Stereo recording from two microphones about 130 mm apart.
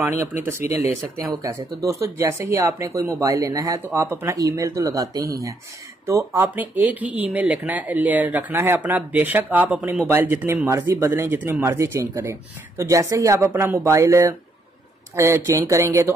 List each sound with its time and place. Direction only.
0.0 s speech: 20° right (ahead or behind)